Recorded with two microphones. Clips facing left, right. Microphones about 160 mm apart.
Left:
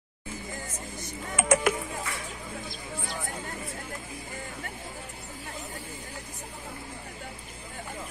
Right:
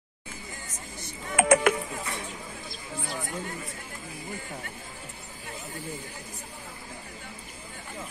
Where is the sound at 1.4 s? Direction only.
60° right (ahead or behind).